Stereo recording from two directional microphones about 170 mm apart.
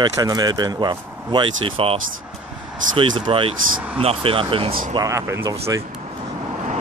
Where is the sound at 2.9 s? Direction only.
30° right (ahead or behind).